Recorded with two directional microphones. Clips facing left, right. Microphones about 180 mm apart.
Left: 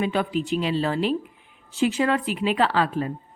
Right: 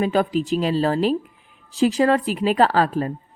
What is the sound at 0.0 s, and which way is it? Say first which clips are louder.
Speech: right 4 dB; 40° right (ahead or behind).